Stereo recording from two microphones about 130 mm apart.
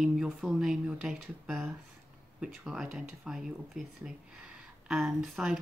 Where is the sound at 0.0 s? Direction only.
Centre (ahead or behind).